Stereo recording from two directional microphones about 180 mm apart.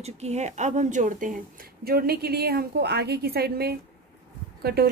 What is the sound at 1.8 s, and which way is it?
A woman's voice, 60° right (ahead or behind).